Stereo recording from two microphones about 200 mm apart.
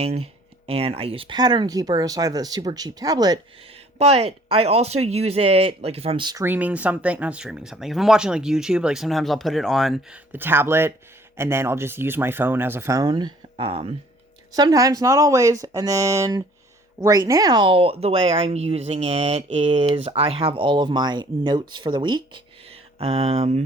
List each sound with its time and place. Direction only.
0.0 s speech: 30° right (ahead or behind)
3.9 s speech: 30° right (ahead or behind)
6.4 s speech: 10° right (ahead or behind); by 23.6 s 30° right (ahead or behind)